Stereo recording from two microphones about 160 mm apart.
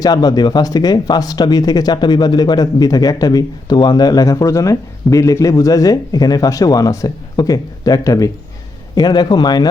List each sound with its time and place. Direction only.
0.0 s speech: 25° left (ahead or behind)